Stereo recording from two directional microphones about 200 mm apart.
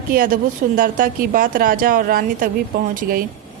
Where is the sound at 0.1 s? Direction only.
45° right (ahead or behind).